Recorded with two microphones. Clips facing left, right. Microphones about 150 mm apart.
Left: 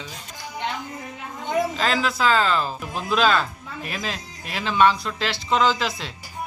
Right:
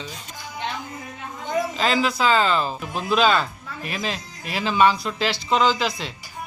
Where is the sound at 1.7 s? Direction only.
Centre (ahead or behind).